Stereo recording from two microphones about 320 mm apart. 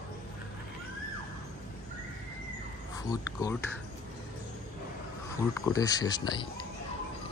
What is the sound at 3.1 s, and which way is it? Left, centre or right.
Speech, centre.